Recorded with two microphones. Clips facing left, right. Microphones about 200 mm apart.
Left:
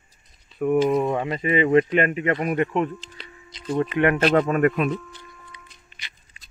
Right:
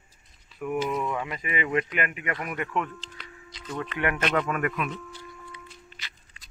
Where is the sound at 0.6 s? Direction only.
35° left (ahead or behind).